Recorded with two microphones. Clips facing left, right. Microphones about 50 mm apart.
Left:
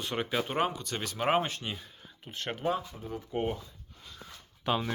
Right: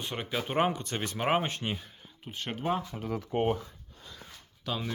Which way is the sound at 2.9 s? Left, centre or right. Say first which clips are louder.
Right 5 dB; right.